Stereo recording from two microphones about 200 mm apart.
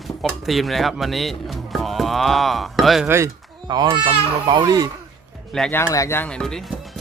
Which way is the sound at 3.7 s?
20° right (ahead or behind).